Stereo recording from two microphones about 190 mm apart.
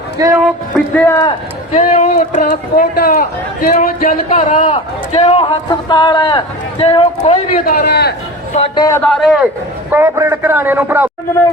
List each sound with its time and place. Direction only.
0.2 s a man's voice: 10° right (ahead or behind)
0.9 s speech: 10° left (ahead or behind)
1.7 s a man's voice: 35° left (ahead or behind)
7.6 s a man's voice: 50° left (ahead or behind)
8.7 s speech: 20° left (ahead or behind)
9.0 s a man's voice: centre (ahead or behind)
9.9 s a man's voice: 10° right (ahead or behind)